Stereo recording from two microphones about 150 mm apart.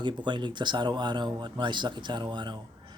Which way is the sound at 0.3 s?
30° right (ahead or behind).